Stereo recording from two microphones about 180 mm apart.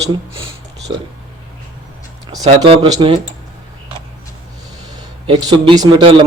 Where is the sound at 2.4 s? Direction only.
30° right (ahead or behind).